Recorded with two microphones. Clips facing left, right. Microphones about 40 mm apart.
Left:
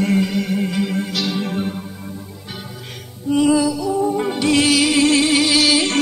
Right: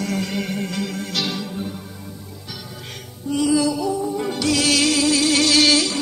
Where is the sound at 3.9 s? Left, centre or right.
Left.